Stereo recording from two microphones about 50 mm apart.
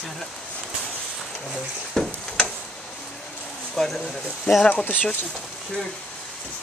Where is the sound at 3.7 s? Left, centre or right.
Centre.